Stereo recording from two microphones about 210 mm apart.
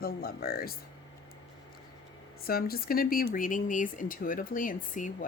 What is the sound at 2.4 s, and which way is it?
Speech, 45° left (ahead or behind).